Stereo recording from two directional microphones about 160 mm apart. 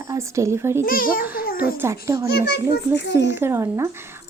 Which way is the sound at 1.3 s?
65° left (ahead or behind).